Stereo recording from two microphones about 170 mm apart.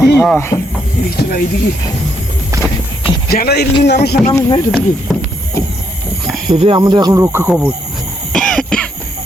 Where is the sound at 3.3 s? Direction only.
65° left (ahead or behind).